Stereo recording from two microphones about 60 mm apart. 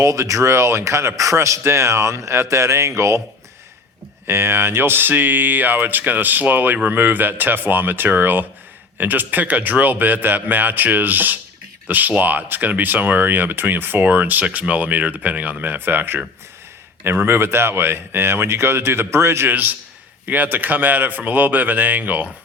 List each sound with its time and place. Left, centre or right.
0.0 s speech: right
4.3 s speech: right
20.2 s speech: right